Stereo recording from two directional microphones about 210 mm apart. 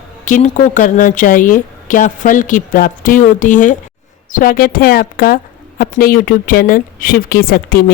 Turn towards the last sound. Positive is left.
turn(degrees=45)  # may be behind; listen again after turning